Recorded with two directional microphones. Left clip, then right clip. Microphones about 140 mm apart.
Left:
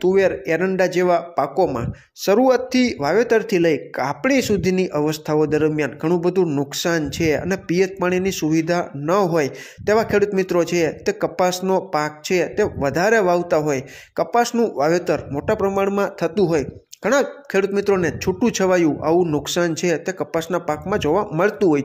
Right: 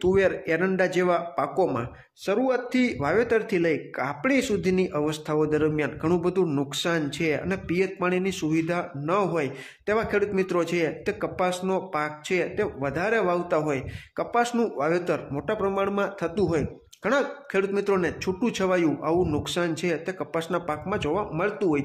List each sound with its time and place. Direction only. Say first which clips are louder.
0.0 s speech: left 5 dB; 20° left (ahead or behind)
2.2 s a man's voice: left 9 dB; 40° left (ahead or behind)
2.7 s a man's voice: left 6 dB; 25° left (ahead or behind)
14.1 s speech: left 7 dB; 35° left (ahead or behind)
14.4 s a man's voice: left 4 dB; 25° left (ahead or behind)